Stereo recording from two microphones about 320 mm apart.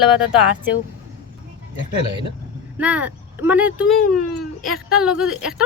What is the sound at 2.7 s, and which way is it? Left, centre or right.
A woman's voice, centre.